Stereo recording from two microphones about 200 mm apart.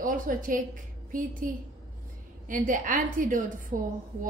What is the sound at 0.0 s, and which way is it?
A woman's voice, 40° right (ahead or behind).